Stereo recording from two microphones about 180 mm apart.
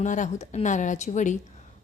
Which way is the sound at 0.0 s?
45° left (ahead or behind).